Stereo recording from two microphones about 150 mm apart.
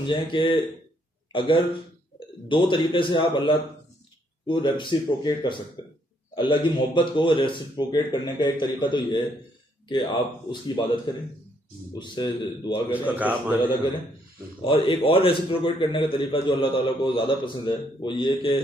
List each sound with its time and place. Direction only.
0.0 s a man's voice: 35° left (ahead or behind)
11.9 s a man's voice: 30° left (ahead or behind)
12.9 s a man's voice: 10° right (ahead or behind)
14.6 s a man's voice: 35° left (ahead or behind)